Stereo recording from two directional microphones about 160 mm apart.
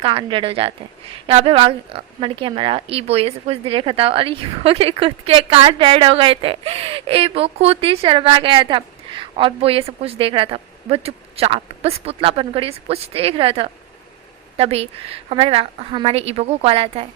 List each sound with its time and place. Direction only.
0.0 s a woman's voice: 30° right (ahead or behind)